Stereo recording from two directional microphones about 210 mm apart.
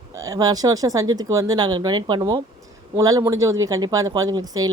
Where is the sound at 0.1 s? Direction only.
15° right (ahead or behind).